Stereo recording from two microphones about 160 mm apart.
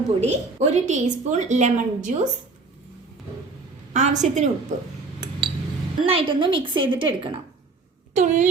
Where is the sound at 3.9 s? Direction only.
50° right (ahead or behind).